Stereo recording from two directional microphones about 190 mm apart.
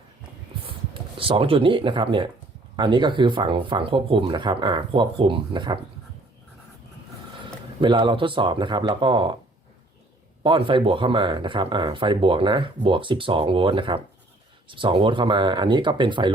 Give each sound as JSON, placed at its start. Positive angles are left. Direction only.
{"t": 1.2, "sound": "speech", "side_deg": -30}
{"t": 7.4, "sound": "speech", "side_deg": -25}
{"t": 10.4, "sound": "speech", "side_deg": -25}